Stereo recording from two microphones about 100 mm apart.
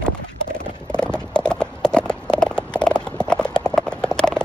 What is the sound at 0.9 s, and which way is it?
Clip-clop, 10° left (ahead or behind).